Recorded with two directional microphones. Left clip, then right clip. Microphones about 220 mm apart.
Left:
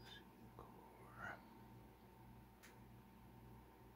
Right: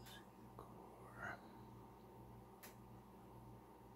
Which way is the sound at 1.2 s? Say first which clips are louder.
Right 2 dB; 5° left (ahead or behind).